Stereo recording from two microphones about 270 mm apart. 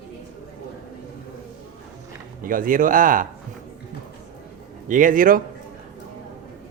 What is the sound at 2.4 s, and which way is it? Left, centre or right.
Speech, right.